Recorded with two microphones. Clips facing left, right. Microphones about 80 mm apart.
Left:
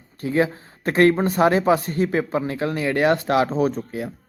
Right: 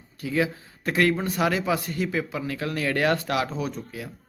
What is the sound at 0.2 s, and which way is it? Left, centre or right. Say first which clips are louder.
Speech: left 5 dB; left.